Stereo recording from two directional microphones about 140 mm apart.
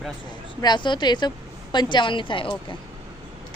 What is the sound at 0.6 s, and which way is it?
A woman's voice, 30° left (ahead or behind).